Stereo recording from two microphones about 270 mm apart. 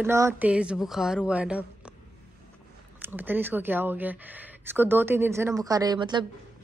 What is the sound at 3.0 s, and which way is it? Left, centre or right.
Speech, centre.